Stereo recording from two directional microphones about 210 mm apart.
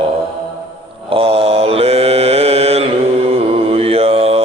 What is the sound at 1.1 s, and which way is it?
Mantra, 25° right (ahead or behind).